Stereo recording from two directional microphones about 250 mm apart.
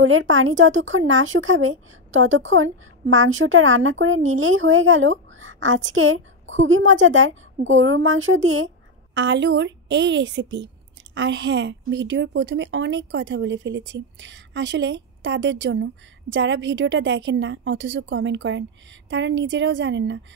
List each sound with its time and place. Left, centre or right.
0.0 s a woman's voice: right